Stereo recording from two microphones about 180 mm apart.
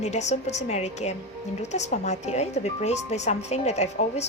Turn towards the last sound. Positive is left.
turn(degrees=40)  # may be behind; listen again after turning